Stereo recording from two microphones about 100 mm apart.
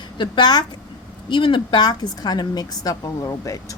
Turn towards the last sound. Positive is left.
turn(degrees=35)  # may be behind; listen again after turning